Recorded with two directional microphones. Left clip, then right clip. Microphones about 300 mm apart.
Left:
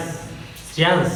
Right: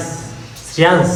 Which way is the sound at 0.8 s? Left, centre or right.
Right.